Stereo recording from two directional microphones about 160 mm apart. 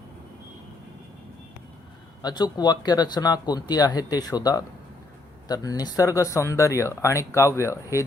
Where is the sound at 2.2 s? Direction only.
25° left (ahead or behind).